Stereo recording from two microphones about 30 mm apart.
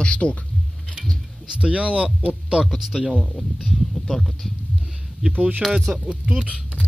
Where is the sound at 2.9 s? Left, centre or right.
Centre.